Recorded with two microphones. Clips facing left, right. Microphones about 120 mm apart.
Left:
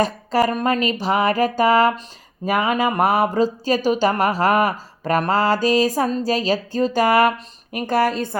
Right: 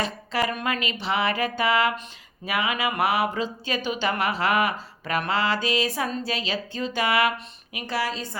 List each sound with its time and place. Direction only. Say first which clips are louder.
0.0 s speech: left 8 dB; 40° left (ahead or behind)